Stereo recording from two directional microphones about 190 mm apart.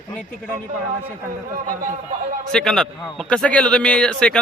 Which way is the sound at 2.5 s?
Centre (ahead or behind).